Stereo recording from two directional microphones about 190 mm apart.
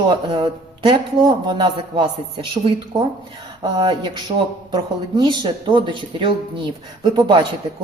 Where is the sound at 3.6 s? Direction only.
20° right (ahead or behind).